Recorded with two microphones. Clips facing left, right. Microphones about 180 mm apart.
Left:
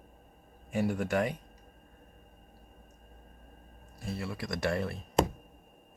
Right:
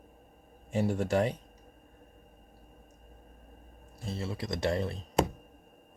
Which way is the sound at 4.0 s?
25° right (ahead or behind).